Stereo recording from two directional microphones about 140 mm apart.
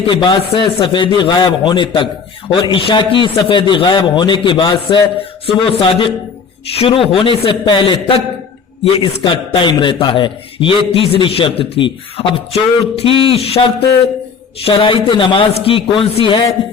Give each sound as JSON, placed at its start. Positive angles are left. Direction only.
{"t": 0.1, "sound": "a man's voice", "side_deg": 35}